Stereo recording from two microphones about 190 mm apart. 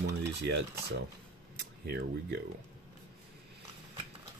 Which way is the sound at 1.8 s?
60° right (ahead or behind).